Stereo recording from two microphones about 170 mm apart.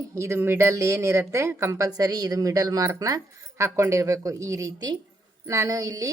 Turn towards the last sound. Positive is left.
turn(degrees=-20)  # may be behind; listen again after turning